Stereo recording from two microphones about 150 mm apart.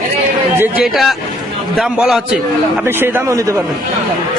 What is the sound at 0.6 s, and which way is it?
Speech, 5° right (ahead or behind).